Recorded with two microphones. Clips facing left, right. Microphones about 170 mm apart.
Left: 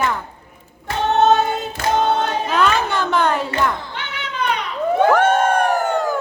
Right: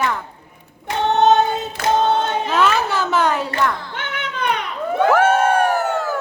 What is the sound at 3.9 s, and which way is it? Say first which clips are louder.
Cat: right 2 dB; 50° right (ahead or behind).